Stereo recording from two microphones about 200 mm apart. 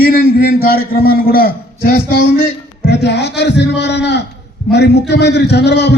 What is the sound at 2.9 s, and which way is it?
Speech, 55° left (ahead or behind).